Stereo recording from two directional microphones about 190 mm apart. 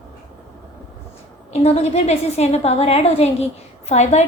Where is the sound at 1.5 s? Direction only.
35° left (ahead or behind).